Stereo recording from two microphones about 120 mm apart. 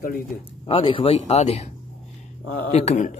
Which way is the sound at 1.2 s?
65° left (ahead or behind).